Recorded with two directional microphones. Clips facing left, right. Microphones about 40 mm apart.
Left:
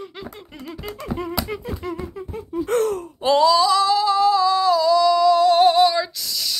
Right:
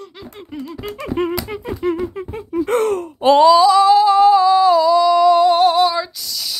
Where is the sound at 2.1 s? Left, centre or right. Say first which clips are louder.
Right 5 dB; right.